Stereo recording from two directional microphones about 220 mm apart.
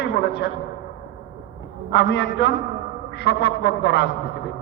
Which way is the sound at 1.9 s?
50° left (ahead or behind).